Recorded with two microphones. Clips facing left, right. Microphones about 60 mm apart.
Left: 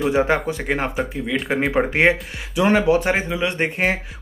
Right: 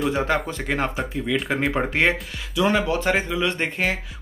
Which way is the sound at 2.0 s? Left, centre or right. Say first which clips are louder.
Left 4 dB; left.